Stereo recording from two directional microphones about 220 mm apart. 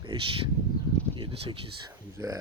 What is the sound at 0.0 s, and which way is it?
Speech, 20° right (ahead or behind).